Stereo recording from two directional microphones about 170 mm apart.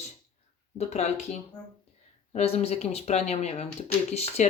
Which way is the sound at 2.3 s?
35° left (ahead or behind).